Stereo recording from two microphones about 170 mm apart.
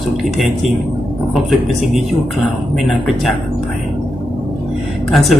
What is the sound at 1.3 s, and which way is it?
Speech, centre (ahead or behind).